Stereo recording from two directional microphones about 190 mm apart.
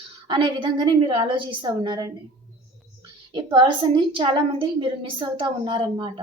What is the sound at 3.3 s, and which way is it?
A woman's voice, 25° right (ahead or behind).